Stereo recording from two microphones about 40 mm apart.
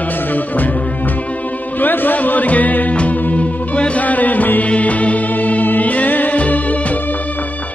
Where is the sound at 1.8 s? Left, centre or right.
Left.